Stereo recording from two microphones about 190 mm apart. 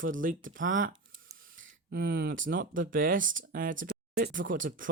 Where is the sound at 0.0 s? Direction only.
45° right (ahead or behind).